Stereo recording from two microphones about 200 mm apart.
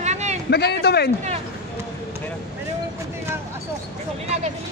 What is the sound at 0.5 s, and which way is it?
Speech, 55° left (ahead or behind).